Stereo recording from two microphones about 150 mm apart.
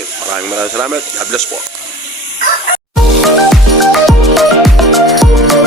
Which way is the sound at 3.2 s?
Centre (ahead or behind).